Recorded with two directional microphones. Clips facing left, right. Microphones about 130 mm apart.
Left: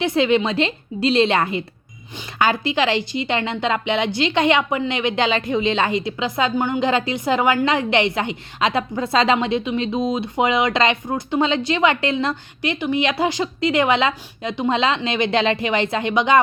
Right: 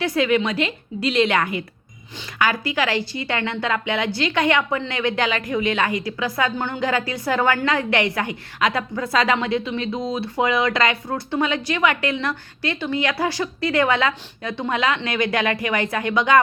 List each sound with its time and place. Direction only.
0.0 s a woman's voice: 25° left (ahead or behind)